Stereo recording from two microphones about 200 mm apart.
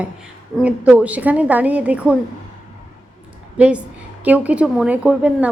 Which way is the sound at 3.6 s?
5° right (ahead or behind).